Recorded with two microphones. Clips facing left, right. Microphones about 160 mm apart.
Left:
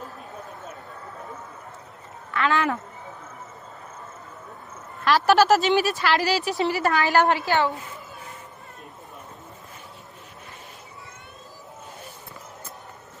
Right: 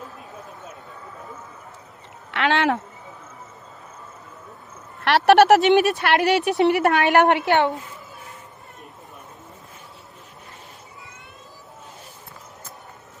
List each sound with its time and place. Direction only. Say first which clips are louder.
2.3 s speech: right 3 dB; 80° right
5.0 s speech: right 4 dB; 70° right (ahead or behind)